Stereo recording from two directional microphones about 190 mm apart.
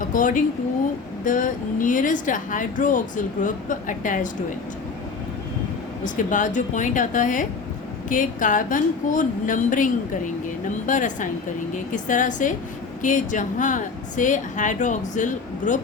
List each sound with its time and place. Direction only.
0.0 s a woman's voice: 45° left (ahead or behind)
6.1 s a woman's voice: 40° left (ahead or behind)